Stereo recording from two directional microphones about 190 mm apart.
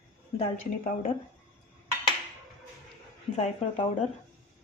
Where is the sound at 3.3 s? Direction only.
30° left (ahead or behind).